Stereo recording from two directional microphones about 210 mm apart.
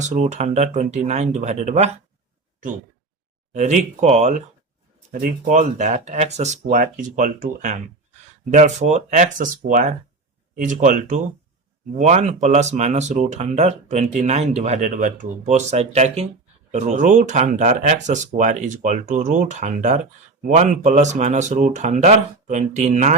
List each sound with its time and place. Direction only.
0.0 s speech: 35° right (ahead or behind)
3.5 s speech: 35° right (ahead or behind)